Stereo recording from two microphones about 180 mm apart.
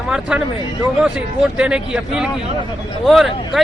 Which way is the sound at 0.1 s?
5° right (ahead or behind).